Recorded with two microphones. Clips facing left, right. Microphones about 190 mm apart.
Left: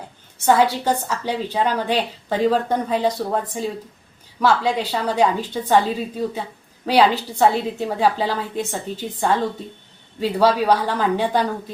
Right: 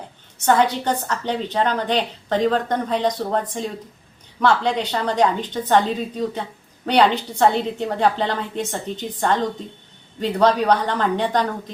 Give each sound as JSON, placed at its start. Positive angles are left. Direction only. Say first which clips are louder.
{"t": 0.4, "sound": "a woman's voice", "louder": "left 1 dB", "side_deg": 5}